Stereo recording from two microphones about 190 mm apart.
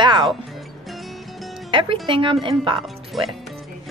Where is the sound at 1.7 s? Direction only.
25° right (ahead or behind).